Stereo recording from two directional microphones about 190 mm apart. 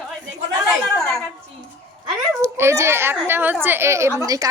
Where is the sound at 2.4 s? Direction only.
15° right (ahead or behind).